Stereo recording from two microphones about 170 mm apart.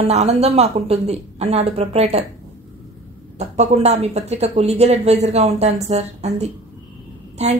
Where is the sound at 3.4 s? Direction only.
40° right (ahead or behind).